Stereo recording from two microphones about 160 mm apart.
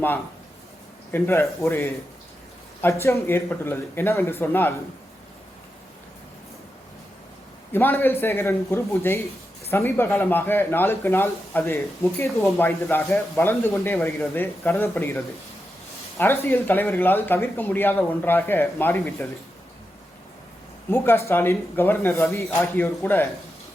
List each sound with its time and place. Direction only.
1.1 s speech: 15° left (ahead or behind)
3.0 s speech: 15° left (ahead or behind)
7.7 s speech: 15° left (ahead or behind)
20.9 s speech: 15° left (ahead or behind)